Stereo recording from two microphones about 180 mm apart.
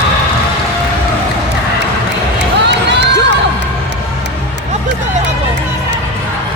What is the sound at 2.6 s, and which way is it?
Crowd, 70° right (ahead or behind).